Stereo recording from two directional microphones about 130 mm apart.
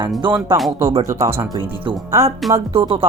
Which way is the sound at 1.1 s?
20° right (ahead or behind).